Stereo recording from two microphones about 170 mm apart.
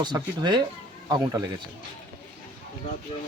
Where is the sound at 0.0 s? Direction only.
25° right (ahead or behind).